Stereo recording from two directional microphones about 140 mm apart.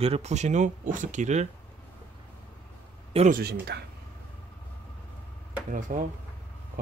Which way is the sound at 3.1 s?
45° right (ahead or behind).